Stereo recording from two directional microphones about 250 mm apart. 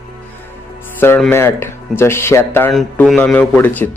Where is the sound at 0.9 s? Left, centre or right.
Centre.